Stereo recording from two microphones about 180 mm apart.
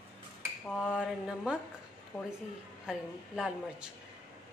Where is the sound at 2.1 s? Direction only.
5° left (ahead or behind).